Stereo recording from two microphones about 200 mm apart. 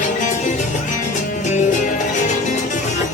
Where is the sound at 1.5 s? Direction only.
35° left (ahead or behind).